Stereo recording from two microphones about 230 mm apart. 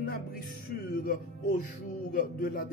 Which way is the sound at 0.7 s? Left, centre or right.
Left.